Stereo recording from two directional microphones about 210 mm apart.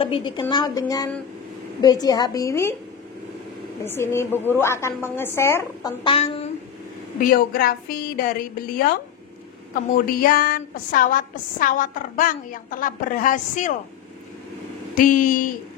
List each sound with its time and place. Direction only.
0.0 s a woman's voice: 25° left (ahead or behind)
3.8 s a woman's voice: 10° left (ahead or behind)
6.1 s a woman's voice: 30° left (ahead or behind)
7.2 s a woman's voice: 40° left (ahead or behind)
10.2 s a woman's voice: 45° left (ahead or behind)
15.0 s a woman's voice: 40° left (ahead or behind)